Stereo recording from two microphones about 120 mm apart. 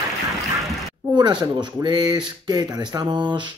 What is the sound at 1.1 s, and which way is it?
Speech, 40° right (ahead or behind).